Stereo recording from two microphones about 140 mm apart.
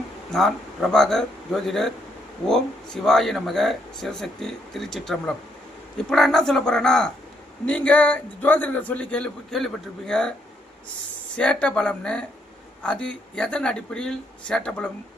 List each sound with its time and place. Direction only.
0.3 s a man's voice: 5° left (ahead or behind)
11.3 s a man's voice: 10° left (ahead or behind)